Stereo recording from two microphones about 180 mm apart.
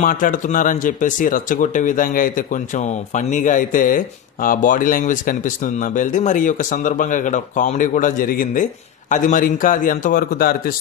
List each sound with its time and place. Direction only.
0.0 s speech: 50° left (ahead or behind)